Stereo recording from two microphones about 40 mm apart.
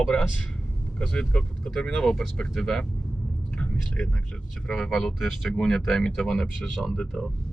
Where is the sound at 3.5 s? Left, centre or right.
Left.